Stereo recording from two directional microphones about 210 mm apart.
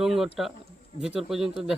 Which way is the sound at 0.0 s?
Centre (ahead or behind).